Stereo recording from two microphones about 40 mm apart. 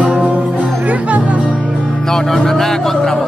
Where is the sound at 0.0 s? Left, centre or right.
Right.